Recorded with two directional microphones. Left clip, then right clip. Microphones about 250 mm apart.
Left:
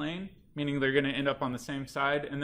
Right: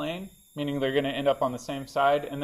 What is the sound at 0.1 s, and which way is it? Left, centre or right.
Speech, centre.